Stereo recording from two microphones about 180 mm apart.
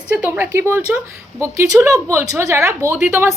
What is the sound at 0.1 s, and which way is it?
A woman's voice, 10° right (ahead or behind).